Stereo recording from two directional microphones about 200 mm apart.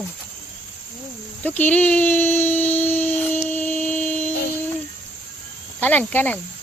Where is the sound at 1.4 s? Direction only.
10° left (ahead or behind).